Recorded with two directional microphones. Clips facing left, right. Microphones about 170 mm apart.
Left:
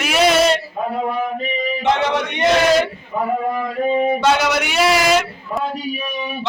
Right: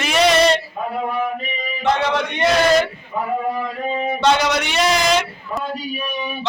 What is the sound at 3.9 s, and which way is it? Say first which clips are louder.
Speech: even; 5° left (ahead or behind).